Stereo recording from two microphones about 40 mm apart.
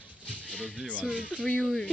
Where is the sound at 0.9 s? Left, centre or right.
Left.